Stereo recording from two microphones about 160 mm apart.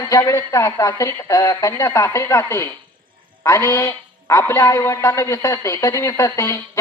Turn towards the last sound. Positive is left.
turn(degrees=20)  # may be behind; listen again after turning